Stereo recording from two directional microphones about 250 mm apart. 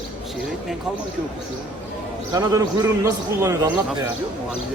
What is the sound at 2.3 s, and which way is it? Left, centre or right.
A man's voice, centre.